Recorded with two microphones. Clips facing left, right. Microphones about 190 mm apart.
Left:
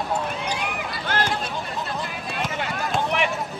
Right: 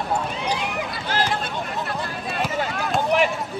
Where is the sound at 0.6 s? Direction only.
55° left (ahead or behind).